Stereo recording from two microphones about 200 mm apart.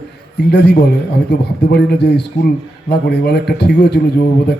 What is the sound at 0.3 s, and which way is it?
A man's voice, 55° left (ahead or behind).